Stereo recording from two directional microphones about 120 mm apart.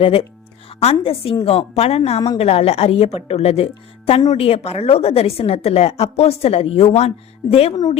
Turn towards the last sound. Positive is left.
turn(degrees=55)  # may be behind; listen again after turning